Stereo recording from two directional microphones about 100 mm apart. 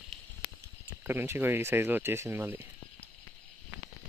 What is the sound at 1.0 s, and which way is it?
Speech, 20° right (ahead or behind).